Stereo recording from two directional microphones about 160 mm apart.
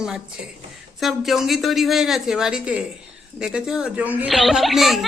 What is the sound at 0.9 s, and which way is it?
A child's voice, centre (ahead or behind).